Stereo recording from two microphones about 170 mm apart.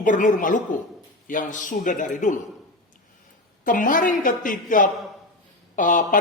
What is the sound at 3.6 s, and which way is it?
Speech, 55° left (ahead or behind).